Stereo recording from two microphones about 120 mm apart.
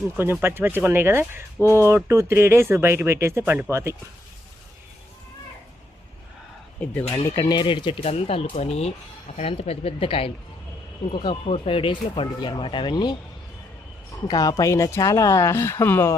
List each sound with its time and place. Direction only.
0.2 s speech: 20° right (ahead or behind)
6.7 s speech: 15° left (ahead or behind)
7.3 s speech: 35° left (ahead or behind)